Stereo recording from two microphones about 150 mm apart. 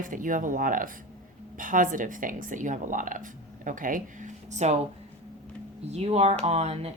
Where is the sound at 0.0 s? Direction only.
60° right (ahead or behind).